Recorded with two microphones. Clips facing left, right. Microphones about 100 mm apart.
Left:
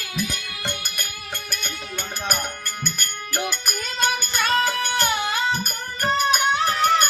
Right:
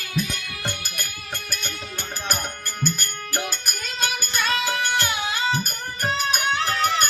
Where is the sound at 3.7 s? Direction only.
50° left (ahead or behind).